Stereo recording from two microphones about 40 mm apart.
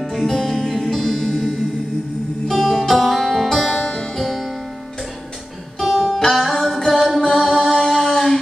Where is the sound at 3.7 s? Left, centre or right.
Left.